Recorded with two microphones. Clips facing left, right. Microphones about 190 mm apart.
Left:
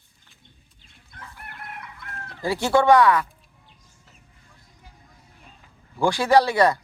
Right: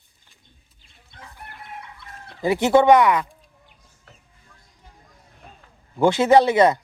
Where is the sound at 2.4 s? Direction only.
20° right (ahead or behind).